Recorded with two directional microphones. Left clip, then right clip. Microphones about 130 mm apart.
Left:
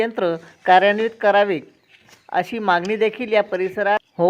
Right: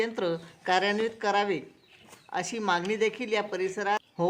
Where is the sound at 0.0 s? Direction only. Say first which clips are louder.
Left 8 dB; 35° left (ahead or behind).